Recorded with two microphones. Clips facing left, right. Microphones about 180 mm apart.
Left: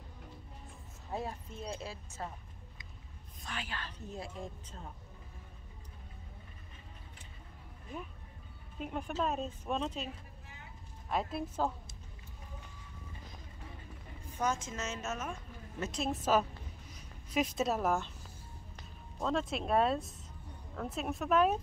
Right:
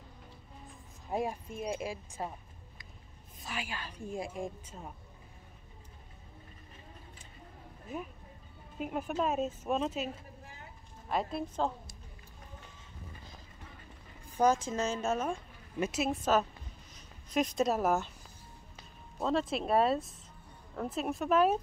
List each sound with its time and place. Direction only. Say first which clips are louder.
1.1 s a woman's voice: right 5 dB; 15° right (ahead or behind)
3.4 s a woman's voice: right 2 dB; 10° right (ahead or behind)
7.9 s speech: right 4 dB; 5° right (ahead or behind)
11.1 s speech: right 2 dB; centre (ahead or behind)
14.4 s a woman's voice: right 7 dB; 35° right (ahead or behind)
15.8 s speech: right 4 dB; 5° right (ahead or behind)
16.9 s speech: right 2 dB; 5° left (ahead or behind)
19.1 s speech: right 3 dB; 5° right (ahead or behind)